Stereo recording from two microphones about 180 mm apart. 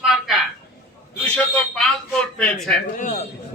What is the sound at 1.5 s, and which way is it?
Speech, 5° left (ahead or behind).